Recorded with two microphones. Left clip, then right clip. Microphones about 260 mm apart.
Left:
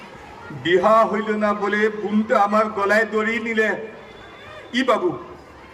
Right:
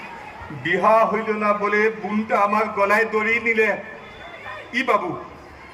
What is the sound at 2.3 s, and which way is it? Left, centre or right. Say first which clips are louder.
A man's voice: left 1 dB; left.